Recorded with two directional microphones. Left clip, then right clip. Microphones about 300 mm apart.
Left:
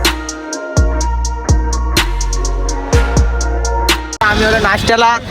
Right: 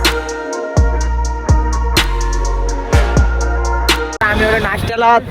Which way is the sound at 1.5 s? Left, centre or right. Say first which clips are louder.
Right 1 dB; centre.